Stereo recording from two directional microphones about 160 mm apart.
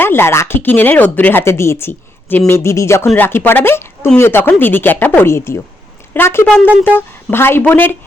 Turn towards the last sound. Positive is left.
turn(degrees=10)  # may be behind; listen again after turning